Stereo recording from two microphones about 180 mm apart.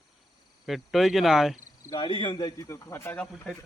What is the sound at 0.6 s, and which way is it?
Speech, centre (ahead or behind).